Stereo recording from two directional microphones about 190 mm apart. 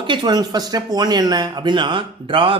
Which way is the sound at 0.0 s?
25° right (ahead or behind).